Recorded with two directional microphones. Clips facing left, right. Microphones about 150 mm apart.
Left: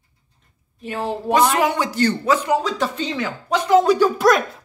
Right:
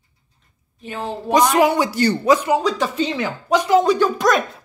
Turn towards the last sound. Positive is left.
turn(degrees=5)  # may be behind; listen again after turning